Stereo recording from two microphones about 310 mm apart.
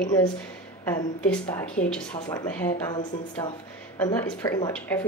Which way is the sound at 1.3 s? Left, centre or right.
Centre.